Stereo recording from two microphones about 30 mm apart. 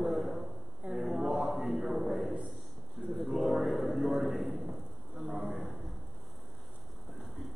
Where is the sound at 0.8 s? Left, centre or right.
Right.